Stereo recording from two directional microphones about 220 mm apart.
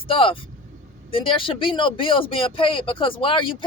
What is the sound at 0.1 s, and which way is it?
Speech, 25° left (ahead or behind).